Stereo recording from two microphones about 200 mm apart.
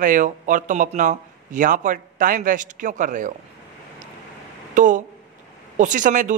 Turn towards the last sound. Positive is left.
turn(degrees=-40)  # may be behind; listen again after turning